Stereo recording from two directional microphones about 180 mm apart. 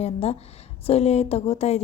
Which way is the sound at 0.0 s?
35° left (ahead or behind).